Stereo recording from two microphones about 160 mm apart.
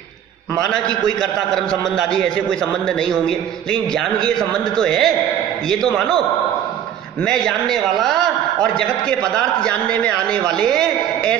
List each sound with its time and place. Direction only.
0.6 s a man's voice: 5° left (ahead or behind)
4.2 s a man's voice: 5° left (ahead or behind)
7.2 s a man's voice: 5° left (ahead or behind)
9.4 s a man's voice: 5° left (ahead or behind)